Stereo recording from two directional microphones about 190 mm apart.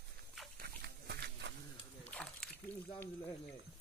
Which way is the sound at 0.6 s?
60° right (ahead or behind).